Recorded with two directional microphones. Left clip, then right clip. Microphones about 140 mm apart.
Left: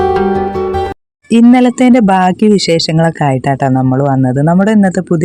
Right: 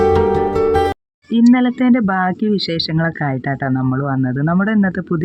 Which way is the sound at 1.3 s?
45° left (ahead or behind).